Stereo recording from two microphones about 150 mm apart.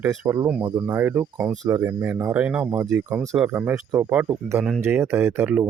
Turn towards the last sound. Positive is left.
turn(degrees=-15)  # may be behind; listen again after turning